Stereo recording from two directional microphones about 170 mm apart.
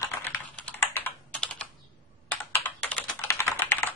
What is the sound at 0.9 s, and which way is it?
Computer keyboard, 10° left (ahead or behind).